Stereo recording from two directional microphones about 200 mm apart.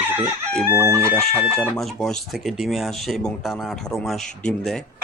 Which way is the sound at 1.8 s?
Centre (ahead or behind).